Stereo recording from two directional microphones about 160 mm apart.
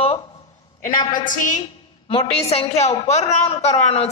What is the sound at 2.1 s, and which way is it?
A woman's voice, 40° left (ahead or behind).